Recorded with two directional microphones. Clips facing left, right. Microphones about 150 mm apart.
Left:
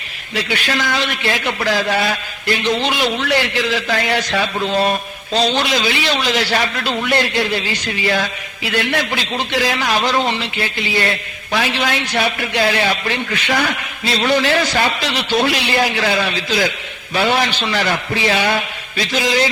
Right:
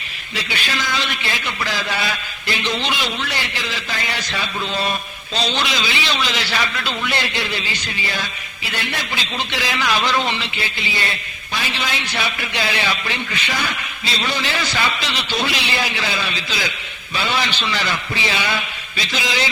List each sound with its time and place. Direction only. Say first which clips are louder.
0.3 s a man's voice: left 5 dB; 60° left (ahead or behind)
8.0 s a man's voice: left 11 dB; 75° left (ahead or behind); by 19.5 s 45° left (ahead or behind)